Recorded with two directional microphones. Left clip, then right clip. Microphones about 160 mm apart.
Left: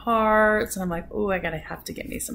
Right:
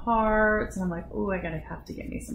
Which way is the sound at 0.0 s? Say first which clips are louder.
Left 4 dB; 20° left (ahead or behind).